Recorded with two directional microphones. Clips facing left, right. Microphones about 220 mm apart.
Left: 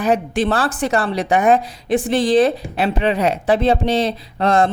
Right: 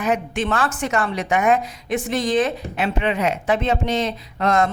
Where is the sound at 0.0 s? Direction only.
35° left (ahead or behind).